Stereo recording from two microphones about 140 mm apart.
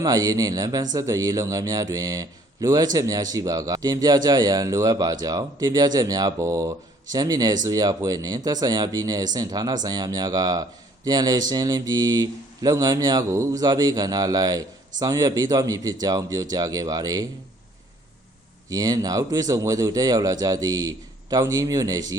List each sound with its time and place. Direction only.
0.0 s speech: 25° right (ahead or behind)
18.7 s speech: 25° right (ahead or behind)